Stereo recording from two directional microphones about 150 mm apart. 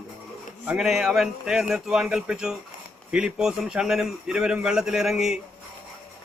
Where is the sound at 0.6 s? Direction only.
5° right (ahead or behind).